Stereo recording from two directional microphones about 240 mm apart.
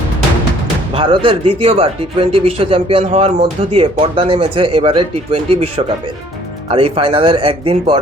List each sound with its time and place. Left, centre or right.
0.9 s speech: right